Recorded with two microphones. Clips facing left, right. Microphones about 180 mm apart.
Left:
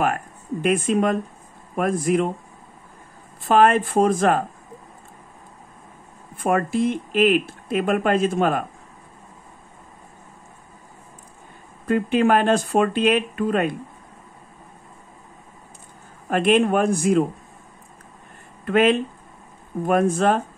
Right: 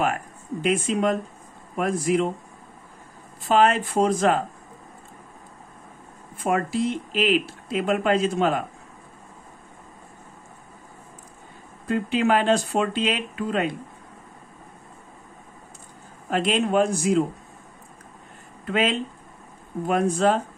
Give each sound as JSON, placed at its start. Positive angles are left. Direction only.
{"t": 0.6, "sound": "speech", "side_deg": 55}
{"t": 3.4, "sound": "speech", "side_deg": 50}
{"t": 6.3, "sound": "speech", "side_deg": 55}
{"t": 11.9, "sound": "speech", "side_deg": 55}
{"t": 16.3, "sound": "speech", "side_deg": 55}
{"t": 18.7, "sound": "speech", "side_deg": 55}